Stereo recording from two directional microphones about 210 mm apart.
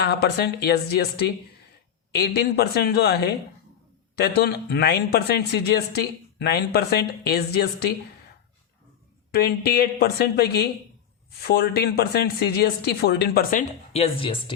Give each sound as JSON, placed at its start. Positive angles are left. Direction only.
{"t": 0.0, "sound": "speech", "side_deg": 50}
{"t": 9.3, "sound": "speech", "side_deg": 50}